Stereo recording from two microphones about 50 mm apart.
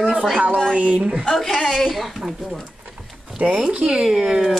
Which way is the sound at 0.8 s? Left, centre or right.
Right.